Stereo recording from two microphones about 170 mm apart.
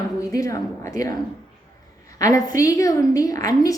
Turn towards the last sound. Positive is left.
turn(degrees=20)  # may be behind; listen again after turning